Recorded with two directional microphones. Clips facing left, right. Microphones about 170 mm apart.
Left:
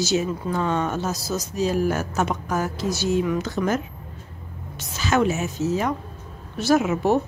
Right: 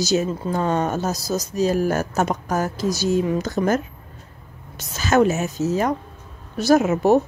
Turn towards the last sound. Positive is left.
turn(degrees=-40)  # may be behind; listen again after turning